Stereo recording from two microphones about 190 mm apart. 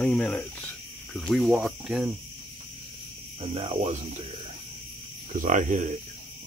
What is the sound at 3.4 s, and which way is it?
Cricket, 30° right (ahead or behind).